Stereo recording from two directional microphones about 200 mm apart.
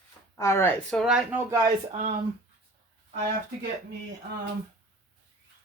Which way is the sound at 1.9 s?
40° right (ahead or behind).